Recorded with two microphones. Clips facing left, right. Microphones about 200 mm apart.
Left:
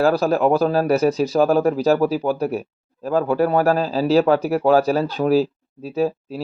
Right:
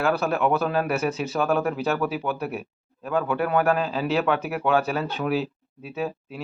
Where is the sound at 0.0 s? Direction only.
35° left (ahead or behind).